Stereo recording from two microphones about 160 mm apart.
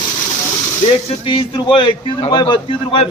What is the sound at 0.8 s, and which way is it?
Speech, 35° left (ahead or behind).